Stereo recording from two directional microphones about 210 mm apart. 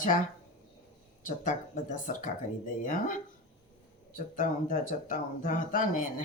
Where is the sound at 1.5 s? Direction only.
40° left (ahead or behind).